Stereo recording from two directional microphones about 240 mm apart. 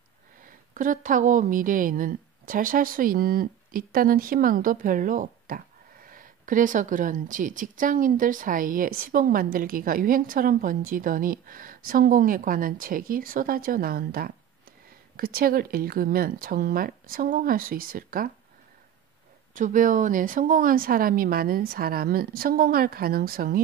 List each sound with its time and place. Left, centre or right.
0.4 s a woman's voice: right
19.5 s a woman's voice: right